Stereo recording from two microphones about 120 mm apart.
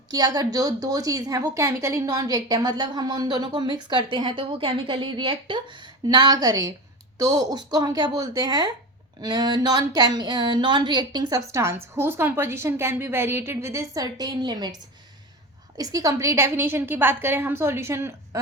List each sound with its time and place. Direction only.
0.1 s a woman's voice: 30° right (ahead or behind)
15.8 s a woman's voice: 30° right (ahead or behind)